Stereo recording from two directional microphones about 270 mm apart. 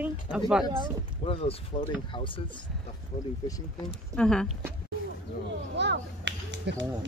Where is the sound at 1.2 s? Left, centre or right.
Left.